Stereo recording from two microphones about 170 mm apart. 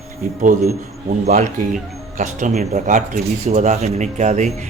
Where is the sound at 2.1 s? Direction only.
45° right (ahead or behind).